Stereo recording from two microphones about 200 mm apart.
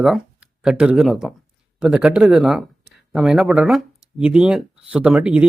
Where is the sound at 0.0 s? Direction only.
5° right (ahead or behind).